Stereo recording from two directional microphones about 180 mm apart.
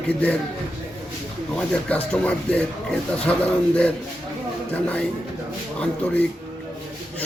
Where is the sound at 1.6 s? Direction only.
5° left (ahead or behind).